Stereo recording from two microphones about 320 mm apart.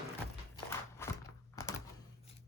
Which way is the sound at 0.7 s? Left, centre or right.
Centre.